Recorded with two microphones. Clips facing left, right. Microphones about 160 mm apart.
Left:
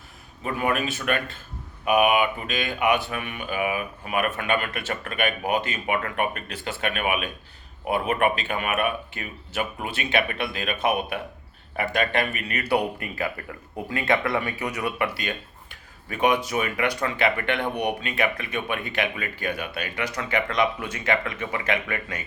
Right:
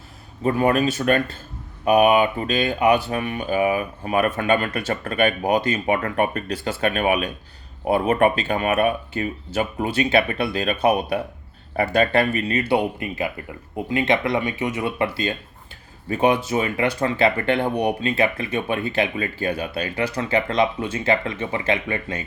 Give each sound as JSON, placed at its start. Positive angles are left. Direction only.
{"t": 0.4, "sound": "speech", "side_deg": -35}